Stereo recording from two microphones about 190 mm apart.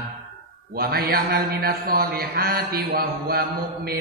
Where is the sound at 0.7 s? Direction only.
50° right (ahead or behind).